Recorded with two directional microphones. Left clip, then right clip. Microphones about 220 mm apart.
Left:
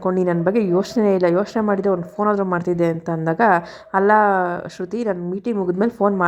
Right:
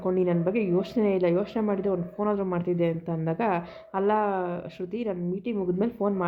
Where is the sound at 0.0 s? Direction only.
20° left (ahead or behind).